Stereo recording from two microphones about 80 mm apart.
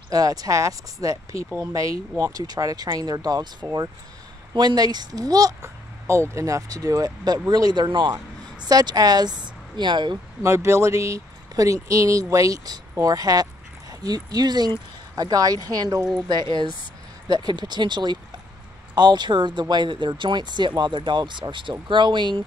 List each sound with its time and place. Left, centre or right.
0.1 s speech: right
4.6 s speech: right
5.6 s a sound: right
6.3 s a woman's voice: right
10.4 s speech: right
16.3 s a woman's voice: right